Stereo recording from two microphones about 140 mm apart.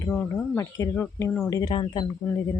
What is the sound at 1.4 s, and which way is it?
Speech, 25° left (ahead or behind).